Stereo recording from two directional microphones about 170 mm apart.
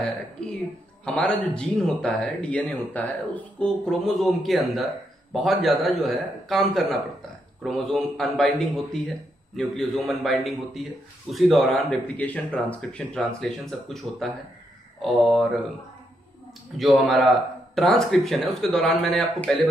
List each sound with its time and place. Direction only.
1.0 s speech: 5° left (ahead or behind)
16.7 s speech: centre (ahead or behind)